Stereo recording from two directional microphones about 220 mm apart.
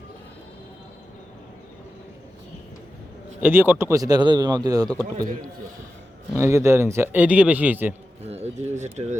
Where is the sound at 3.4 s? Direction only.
10° right (ahead or behind).